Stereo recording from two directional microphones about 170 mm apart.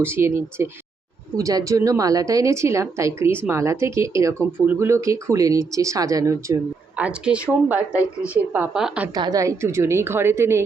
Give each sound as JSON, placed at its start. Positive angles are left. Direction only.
{"t": 0.0, "sound": "a woman's voice", "side_deg": -15}
{"t": 9.1, "sound": "a woman's voice", "side_deg": -20}